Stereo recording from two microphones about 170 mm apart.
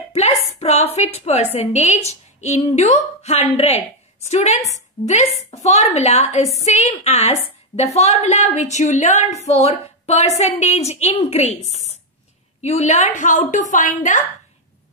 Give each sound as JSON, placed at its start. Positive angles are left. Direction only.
{"t": 0.1, "sound": "a woman's voice", "side_deg": 40}